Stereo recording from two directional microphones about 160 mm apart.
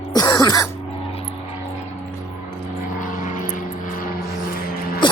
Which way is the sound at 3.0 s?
55° left (ahead or behind).